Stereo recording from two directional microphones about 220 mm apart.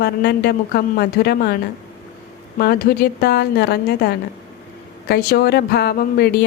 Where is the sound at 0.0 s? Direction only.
45° left (ahead or behind).